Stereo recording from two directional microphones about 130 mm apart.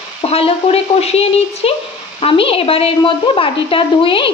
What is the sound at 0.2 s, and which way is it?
A woman's voice, 50° left (ahead or behind).